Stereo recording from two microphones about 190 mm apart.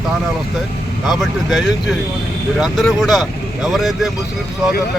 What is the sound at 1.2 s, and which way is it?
Speech, centre (ahead or behind).